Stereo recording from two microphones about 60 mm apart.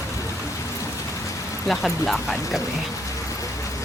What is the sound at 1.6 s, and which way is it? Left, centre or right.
Speech, centre.